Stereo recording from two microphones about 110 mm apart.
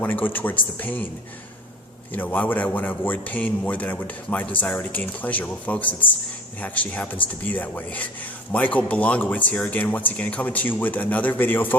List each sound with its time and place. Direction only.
0.0 s a man's voice: 15° left (ahead or behind)
2.1 s a man's voice: 15° left (ahead or behind)